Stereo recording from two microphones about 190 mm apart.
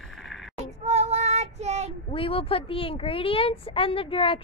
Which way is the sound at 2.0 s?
30° left (ahead or behind).